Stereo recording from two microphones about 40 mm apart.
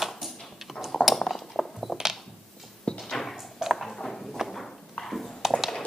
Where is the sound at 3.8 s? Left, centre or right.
Centre.